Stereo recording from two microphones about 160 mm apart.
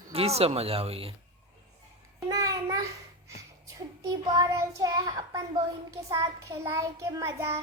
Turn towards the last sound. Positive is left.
turn(degrees=-15)  # may be behind; listen again after turning